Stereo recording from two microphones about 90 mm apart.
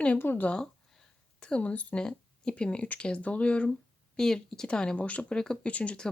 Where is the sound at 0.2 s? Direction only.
20° left (ahead or behind).